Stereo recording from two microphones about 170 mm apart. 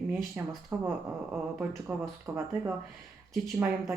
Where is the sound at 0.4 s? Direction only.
10° right (ahead or behind).